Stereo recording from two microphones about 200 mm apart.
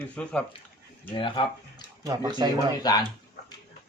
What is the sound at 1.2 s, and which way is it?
Speech, 25° left (ahead or behind).